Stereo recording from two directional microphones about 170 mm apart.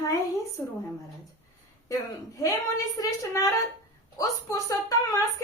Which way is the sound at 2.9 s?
20° left (ahead or behind).